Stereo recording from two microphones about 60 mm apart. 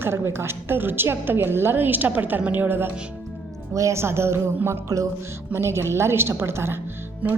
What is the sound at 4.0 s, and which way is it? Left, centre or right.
Speech, right.